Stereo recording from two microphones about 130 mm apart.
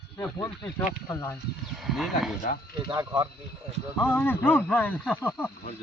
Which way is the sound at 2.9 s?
35° right (ahead or behind).